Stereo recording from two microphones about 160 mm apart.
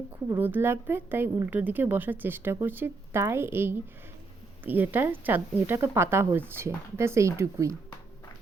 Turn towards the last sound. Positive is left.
turn(degrees=-20)  # may be behind; listen again after turning